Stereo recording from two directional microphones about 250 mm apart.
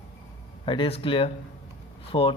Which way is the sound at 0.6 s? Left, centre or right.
Centre.